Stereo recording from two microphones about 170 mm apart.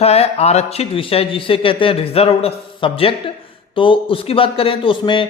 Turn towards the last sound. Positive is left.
turn(degrees=30)  # may be behind; listen again after turning